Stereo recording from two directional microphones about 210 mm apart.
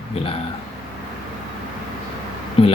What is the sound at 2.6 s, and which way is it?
Speech, 25° left (ahead or behind).